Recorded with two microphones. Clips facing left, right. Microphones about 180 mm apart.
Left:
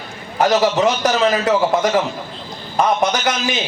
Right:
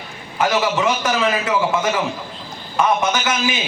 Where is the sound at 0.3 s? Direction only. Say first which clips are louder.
Left 4 dB; 40° left (ahead or behind).